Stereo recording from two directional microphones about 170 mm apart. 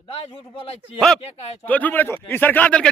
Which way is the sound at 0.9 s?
5° left (ahead or behind).